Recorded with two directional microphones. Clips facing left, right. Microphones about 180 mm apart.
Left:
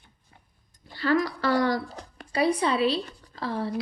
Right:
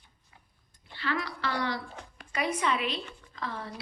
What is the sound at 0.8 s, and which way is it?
Speech, 40° left (ahead or behind).